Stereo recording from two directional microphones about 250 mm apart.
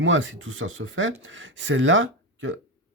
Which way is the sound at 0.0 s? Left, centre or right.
Right.